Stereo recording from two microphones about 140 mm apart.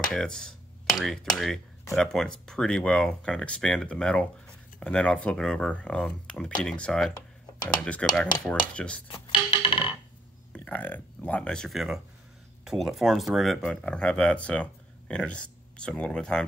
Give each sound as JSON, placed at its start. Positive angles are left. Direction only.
{"t": 0.1, "sound": "speech", "side_deg": 5}
{"t": 9.0, "sound": "music", "side_deg": 35}
{"t": 10.5, "sound": "speech", "side_deg": 10}